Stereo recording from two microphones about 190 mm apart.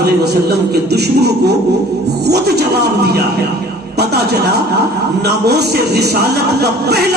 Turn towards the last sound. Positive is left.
turn(degrees=-60)  # may be behind; listen again after turning